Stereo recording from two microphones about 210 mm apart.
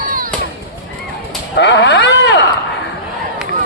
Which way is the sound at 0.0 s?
40° right (ahead or behind).